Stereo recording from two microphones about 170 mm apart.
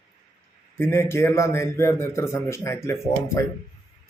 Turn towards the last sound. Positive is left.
turn(degrees=15)  # may be behind; listen again after turning